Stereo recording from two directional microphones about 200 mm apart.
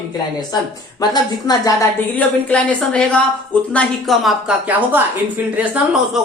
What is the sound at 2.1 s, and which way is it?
Speech, 5° left (ahead or behind).